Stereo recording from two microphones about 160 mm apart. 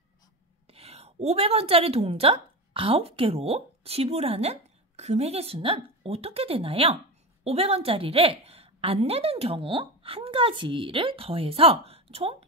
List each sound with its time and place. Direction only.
0.7 s a woman's voice: 40° right (ahead or behind)